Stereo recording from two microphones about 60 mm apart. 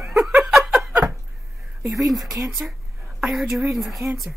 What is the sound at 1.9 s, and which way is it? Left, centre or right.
A woman's voice, centre.